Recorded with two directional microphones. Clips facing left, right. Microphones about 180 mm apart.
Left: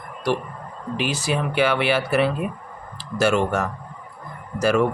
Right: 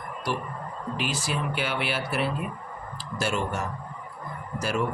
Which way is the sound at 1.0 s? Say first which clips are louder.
Left 7 dB; 70° left (ahead or behind).